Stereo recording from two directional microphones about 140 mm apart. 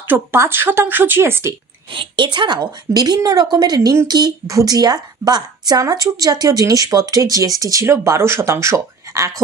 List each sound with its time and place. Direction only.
0.1 s a woman's voice: 15° right (ahead or behind)
1.9 s a woman's voice: 35° right (ahead or behind)